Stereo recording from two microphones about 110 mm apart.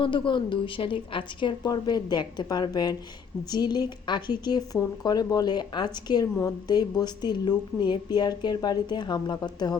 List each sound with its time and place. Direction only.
0.0 s a woman's voice: 50° left (ahead or behind)